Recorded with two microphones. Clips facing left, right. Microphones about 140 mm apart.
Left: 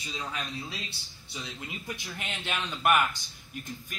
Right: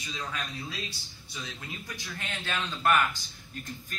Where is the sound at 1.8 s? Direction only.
20° left (ahead or behind).